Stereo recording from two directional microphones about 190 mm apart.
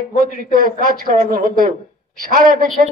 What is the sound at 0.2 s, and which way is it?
A man's voice, 50° right (ahead or behind).